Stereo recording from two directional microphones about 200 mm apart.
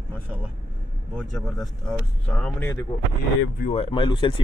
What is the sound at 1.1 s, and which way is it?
Speech, centre (ahead or behind).